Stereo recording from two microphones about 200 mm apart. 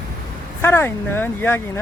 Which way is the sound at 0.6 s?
10° left (ahead or behind).